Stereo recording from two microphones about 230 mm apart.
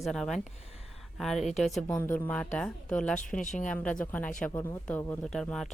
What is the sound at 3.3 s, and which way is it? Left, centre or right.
Speech, left.